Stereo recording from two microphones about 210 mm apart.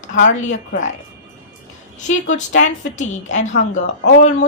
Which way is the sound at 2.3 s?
35° left (ahead or behind).